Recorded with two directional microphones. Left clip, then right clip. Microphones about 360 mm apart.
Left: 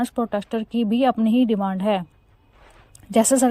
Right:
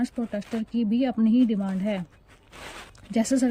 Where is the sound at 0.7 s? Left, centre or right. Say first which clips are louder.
Left 7 dB; left.